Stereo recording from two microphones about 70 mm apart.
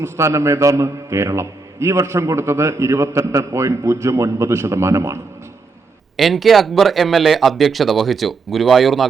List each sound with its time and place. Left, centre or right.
0.0 s a man's voice: right
6.1 s speech: centre